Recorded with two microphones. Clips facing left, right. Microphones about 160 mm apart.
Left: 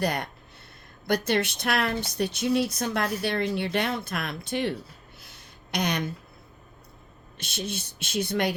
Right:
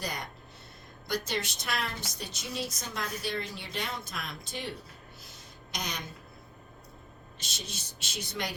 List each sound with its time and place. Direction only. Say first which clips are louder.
0.0 s speech: left 10 dB; 65° left (ahead or behind)
5.2 s a sound: even; 65° left (ahead or behind)
7.3 s speech: left 11 dB; 60° left (ahead or behind)